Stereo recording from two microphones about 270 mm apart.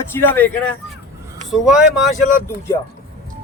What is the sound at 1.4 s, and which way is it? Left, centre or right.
Speech, centre.